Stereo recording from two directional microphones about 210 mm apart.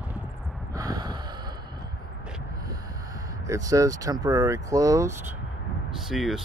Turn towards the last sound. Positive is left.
turn(degrees=0)  # may be behind; listen again after turning